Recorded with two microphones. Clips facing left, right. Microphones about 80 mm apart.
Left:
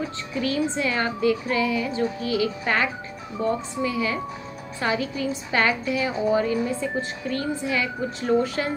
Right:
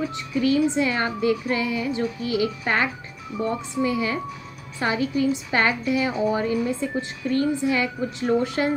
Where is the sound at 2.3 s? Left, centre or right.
Right.